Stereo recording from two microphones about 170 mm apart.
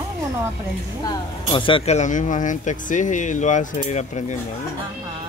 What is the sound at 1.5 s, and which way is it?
Speech, 30° left (ahead or behind).